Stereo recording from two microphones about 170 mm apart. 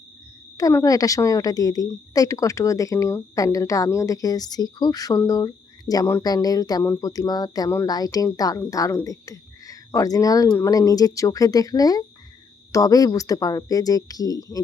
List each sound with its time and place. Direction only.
0.5 s a woman's voice: 20° left (ahead or behind)